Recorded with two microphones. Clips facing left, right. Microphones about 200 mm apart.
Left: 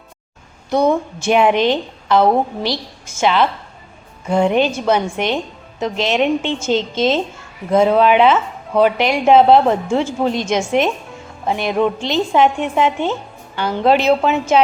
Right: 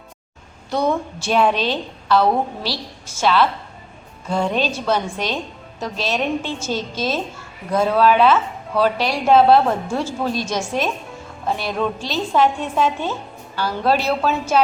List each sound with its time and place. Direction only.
0.7 s a woman's voice: 20° left (ahead or behind)
4.5 s a woman's voice: 20° left (ahead or behind)